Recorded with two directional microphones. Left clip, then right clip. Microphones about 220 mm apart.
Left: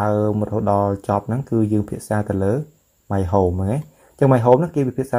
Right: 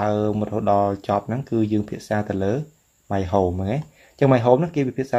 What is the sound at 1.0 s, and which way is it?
Speech, 20° left (ahead or behind).